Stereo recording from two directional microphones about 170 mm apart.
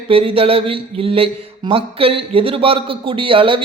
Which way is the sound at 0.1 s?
35° right (ahead or behind).